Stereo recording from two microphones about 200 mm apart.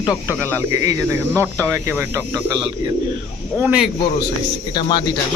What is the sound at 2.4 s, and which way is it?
Speech, 20° right (ahead or behind).